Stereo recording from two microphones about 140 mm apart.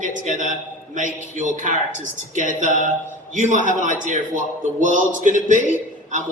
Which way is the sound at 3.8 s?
65° right (ahead or behind).